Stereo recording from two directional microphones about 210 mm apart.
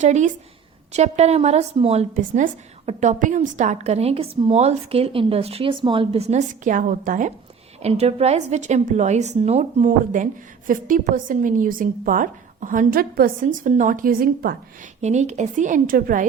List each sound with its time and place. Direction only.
0.0 s a woman's voice: 35° right (ahead or behind)